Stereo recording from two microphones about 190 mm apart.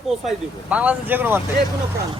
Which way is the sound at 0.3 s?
5° right (ahead or behind).